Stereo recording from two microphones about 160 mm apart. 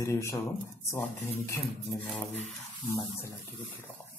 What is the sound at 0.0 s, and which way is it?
A man's voice, 20° left (ahead or behind).